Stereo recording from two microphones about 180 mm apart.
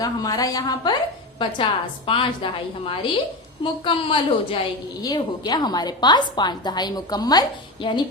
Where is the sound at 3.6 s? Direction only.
25° left (ahead or behind).